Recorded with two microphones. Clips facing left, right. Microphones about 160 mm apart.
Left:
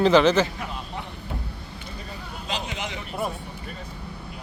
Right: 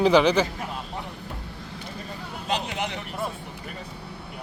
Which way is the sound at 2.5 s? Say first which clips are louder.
Right 3 dB; 60° right (ahead or behind).